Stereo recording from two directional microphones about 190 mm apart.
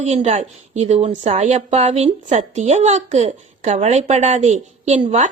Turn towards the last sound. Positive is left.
turn(degrees=-35)  # may be behind; listen again after turning